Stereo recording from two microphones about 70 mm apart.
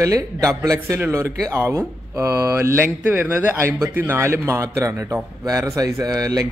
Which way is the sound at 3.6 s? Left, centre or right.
Right.